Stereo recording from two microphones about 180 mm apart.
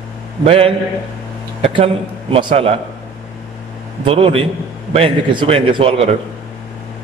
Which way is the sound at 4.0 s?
30° right (ahead or behind).